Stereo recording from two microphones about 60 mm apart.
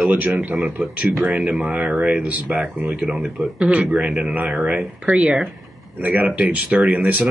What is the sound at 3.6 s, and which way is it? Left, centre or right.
Speech, centre.